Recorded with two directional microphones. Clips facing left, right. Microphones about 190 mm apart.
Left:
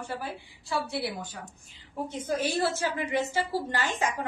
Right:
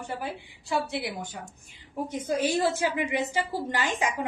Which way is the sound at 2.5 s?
15° right (ahead or behind).